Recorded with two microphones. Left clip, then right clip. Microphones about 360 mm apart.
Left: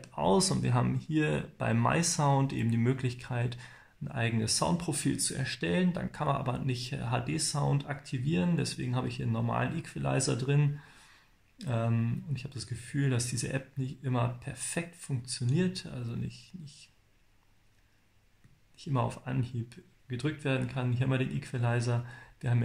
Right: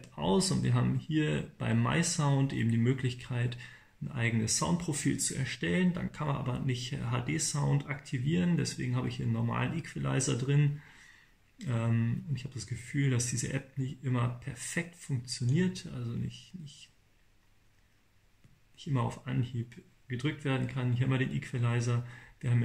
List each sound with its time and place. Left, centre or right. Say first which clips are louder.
0.2 s speech: left 3 dB; centre
18.8 s speech: left 3 dB; centre